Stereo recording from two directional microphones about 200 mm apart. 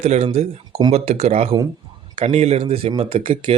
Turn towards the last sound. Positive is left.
turn(degrees=-30)  # may be behind; listen again after turning